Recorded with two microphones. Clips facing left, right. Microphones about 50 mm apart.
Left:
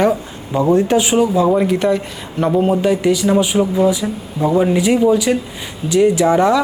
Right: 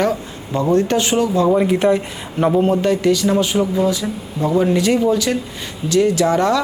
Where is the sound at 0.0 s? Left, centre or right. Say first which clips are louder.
Left 3 dB; centre.